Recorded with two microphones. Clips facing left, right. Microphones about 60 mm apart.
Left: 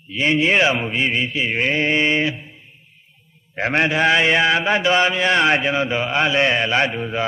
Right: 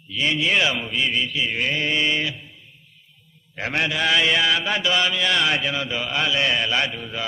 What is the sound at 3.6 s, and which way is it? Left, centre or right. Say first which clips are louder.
Mantra: left 6 dB; left.